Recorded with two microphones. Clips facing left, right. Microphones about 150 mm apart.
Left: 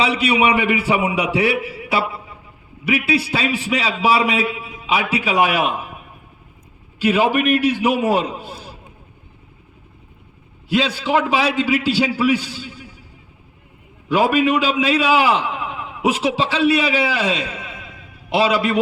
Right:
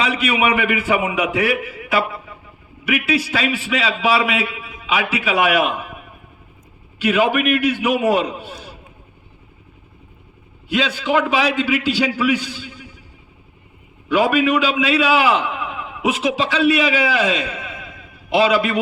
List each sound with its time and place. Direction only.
0.0 s a man's voice: 30° left (ahead or behind)
3.1 s a man's voice: 35° left (ahead or behind)
7.0 s a man's voice: 35° left (ahead or behind)
10.7 s a man's voice: 35° left (ahead or behind)
14.1 s a man's voice: 35° left (ahead or behind)